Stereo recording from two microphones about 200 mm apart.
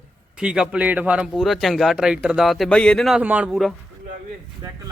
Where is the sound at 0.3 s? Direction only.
5° right (ahead or behind).